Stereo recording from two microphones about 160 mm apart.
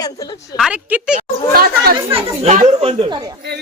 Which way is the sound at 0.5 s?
5° right (ahead or behind).